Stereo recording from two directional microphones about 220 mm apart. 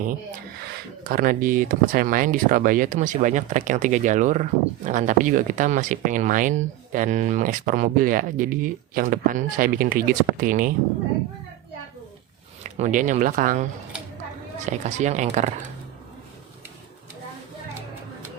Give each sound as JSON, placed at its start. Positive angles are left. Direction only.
{"t": 1.0, "sound": "speech", "side_deg": -40}
{"t": 12.6, "sound": "speech", "side_deg": -30}
{"t": 14.7, "sound": "speech", "side_deg": -30}